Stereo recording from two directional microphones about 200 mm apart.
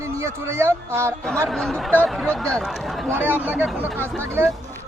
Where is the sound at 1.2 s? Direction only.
5° left (ahead or behind).